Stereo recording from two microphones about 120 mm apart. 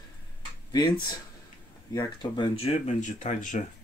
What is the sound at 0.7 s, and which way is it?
Speech, 35° left (ahead or behind).